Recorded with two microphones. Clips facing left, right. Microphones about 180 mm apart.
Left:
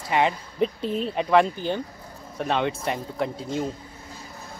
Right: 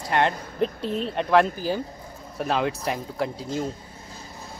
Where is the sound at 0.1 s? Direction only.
Centre (ahead or behind).